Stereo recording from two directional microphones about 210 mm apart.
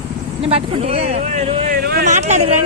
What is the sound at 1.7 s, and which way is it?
Speech, 45° right (ahead or behind).